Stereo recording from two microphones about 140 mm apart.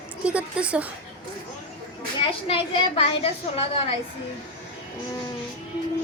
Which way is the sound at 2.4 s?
45° left (ahead or behind).